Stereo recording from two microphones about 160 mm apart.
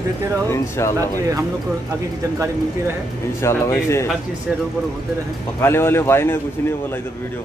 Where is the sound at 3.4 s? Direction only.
15° left (ahead or behind).